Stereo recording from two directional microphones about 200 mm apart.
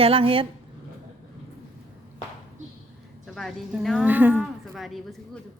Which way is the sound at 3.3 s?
Centre (ahead or behind).